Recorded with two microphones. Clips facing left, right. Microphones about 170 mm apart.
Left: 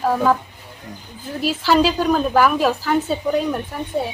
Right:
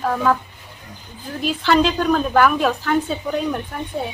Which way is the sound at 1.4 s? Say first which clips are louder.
Left 1 dB; 5° left (ahead or behind).